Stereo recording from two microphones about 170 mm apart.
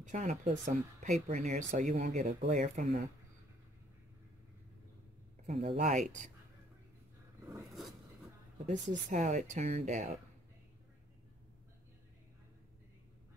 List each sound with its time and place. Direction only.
0.0 s speech: 45° right (ahead or behind)
5.5 s speech: 35° right (ahead or behind)
8.6 s speech: 45° right (ahead or behind)